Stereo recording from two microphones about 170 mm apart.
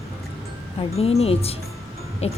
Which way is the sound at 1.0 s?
35° left (ahead or behind).